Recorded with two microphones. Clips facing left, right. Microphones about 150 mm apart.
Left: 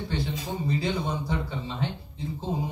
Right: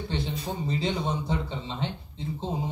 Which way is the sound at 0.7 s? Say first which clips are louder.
Left 1 dB; 25° right (ahead or behind).